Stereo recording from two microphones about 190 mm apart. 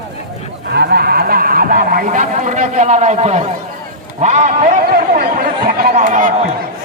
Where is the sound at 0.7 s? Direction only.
60° right (ahead or behind); by 6.3 s 40° right (ahead or behind).